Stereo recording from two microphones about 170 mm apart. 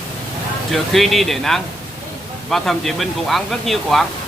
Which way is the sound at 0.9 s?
Centre (ahead or behind).